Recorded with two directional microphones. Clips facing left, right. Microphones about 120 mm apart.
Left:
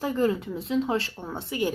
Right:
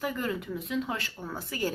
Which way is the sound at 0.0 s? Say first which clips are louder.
Left 7 dB; 30° left (ahead or behind).